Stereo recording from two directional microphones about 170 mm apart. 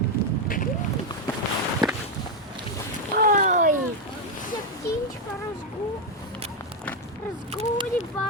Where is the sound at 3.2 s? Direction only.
50° right (ahead or behind).